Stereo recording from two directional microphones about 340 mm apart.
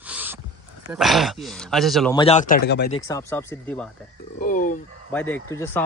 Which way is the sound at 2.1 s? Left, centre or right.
Centre.